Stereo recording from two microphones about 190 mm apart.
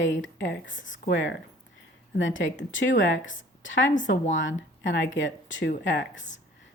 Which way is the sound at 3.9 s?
40° left (ahead or behind).